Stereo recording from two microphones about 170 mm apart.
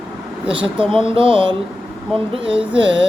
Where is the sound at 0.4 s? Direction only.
30° right (ahead or behind).